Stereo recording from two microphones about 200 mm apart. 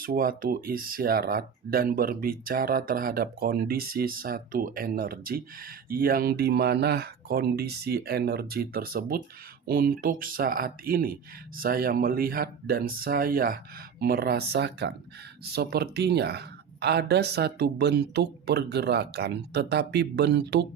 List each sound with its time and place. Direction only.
0.0 s speech: 45° right (ahead or behind)